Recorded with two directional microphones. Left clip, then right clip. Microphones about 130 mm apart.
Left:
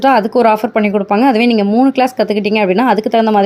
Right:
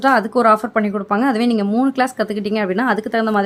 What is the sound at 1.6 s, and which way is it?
A woman's voice, centre (ahead or behind).